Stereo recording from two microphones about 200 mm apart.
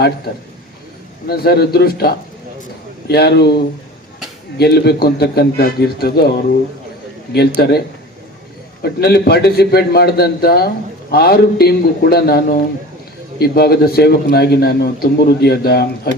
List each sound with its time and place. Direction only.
1.3 s a man's voice: 50° left (ahead or behind)
7.6 s a man's voice: 50° left (ahead or behind)
8.8 s a man's voice: 55° left (ahead or behind)